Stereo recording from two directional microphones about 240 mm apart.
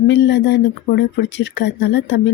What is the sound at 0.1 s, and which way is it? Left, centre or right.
Speech, left.